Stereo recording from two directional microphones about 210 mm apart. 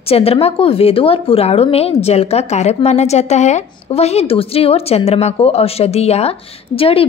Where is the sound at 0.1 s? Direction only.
30° left (ahead or behind).